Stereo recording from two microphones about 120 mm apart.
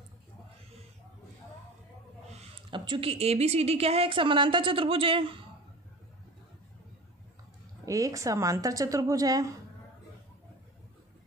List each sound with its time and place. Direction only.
2.7 s a sound: 40° right (ahead or behind)
3.1 s a woman's voice: 60° right (ahead or behind); by 5.4 s 45° right (ahead or behind)
7.8 s a woman's voice: 30° right (ahead or behind)